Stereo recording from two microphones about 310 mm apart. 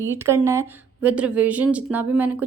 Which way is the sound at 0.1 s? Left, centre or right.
Centre.